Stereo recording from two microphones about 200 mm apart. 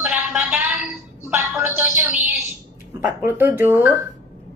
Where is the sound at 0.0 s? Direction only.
5° right (ahead or behind).